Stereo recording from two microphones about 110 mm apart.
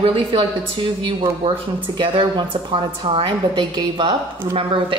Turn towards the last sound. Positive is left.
turn(degrees=-55)  # may be behind; listen again after turning